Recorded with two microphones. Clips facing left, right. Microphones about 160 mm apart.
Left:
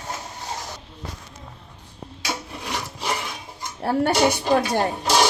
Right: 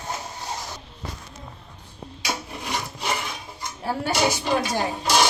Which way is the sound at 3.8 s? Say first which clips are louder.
Left 4 dB; 60° left (ahead or behind).